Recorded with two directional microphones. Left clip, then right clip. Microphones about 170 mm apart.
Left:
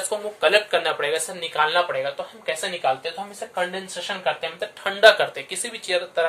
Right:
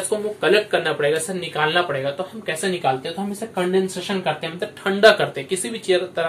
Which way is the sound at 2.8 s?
25° left (ahead or behind).